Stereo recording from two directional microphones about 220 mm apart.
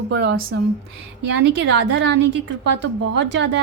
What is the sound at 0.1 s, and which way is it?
A woman's voice, 50° right (ahead or behind).